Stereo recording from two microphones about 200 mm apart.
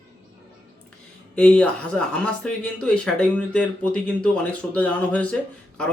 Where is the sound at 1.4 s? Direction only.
5° left (ahead or behind).